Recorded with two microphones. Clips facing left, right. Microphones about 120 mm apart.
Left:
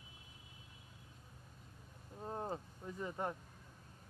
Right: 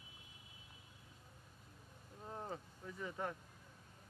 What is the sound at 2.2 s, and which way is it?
Speech, 30° left (ahead or behind).